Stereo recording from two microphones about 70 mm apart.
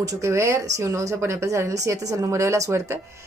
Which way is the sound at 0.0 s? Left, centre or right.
Right.